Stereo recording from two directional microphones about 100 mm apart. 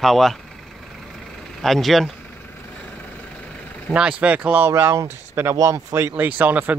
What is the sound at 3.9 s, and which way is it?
Speech, 10° right (ahead or behind).